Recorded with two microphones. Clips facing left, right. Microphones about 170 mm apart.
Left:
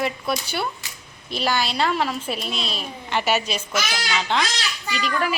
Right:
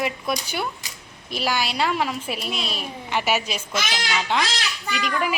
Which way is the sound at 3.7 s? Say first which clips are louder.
Even; 25° right (ahead or behind).